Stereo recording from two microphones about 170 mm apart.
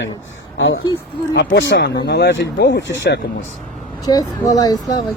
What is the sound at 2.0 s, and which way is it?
Speech, 80° left.